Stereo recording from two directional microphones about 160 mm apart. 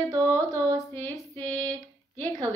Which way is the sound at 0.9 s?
10° left (ahead or behind).